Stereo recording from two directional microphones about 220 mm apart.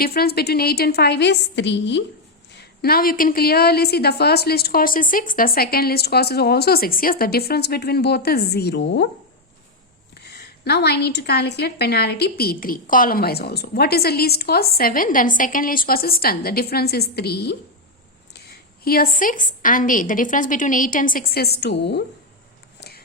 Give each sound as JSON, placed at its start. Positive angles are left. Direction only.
{"t": 0.0, "sound": "a woman's voice", "side_deg": 45}
{"t": 10.2, "sound": "a woman's voice", "side_deg": 50}
{"t": 18.9, "sound": "a woman's voice", "side_deg": 40}